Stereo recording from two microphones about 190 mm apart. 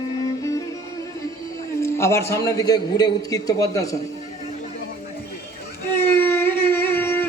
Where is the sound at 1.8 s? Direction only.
15° left (ahead or behind).